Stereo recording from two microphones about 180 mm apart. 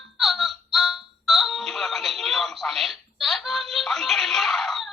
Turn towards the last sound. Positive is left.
turn(degrees=0)  # may be behind; listen again after turning